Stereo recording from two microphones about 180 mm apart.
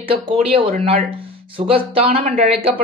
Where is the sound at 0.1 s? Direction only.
30° right (ahead or behind).